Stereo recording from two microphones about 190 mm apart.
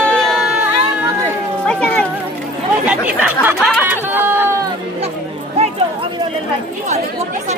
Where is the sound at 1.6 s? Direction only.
5° left (ahead or behind).